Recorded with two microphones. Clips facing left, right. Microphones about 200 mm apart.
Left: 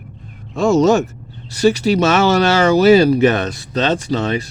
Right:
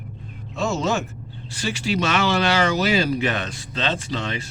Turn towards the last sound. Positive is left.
turn(degrees=40)  # may be behind; listen again after turning